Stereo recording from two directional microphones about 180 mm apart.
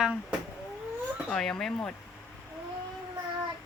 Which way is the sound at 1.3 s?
5° left (ahead or behind).